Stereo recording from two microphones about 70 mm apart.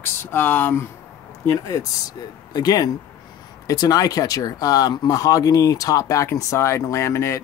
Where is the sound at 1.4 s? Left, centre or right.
Left.